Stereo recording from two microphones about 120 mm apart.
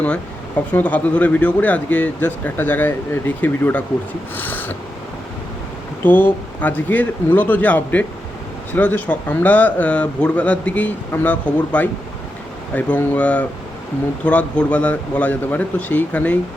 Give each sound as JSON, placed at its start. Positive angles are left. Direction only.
{"t": 0.7, "sound": "speech", "side_deg": 15}
{"t": 6.0, "sound": "speech", "side_deg": 15}